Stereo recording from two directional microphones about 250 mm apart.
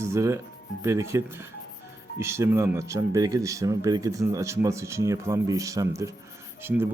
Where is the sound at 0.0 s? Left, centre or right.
Centre.